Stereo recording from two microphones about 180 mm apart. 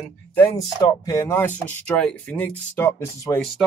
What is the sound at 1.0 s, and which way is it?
Speech, 15° left (ahead or behind).